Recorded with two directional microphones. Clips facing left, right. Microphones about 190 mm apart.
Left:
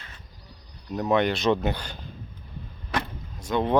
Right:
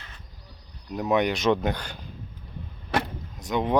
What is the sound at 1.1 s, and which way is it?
Speech, 15° right (ahead or behind).